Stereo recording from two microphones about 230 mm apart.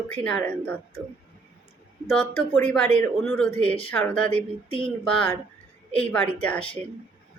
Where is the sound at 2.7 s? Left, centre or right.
Centre.